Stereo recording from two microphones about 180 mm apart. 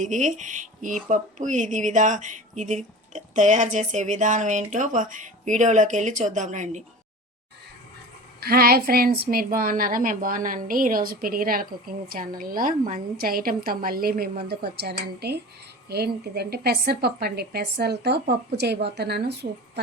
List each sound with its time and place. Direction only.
0.0 s speech: 45° right (ahead or behind)
8.4 s a woman's voice: 60° right (ahead or behind)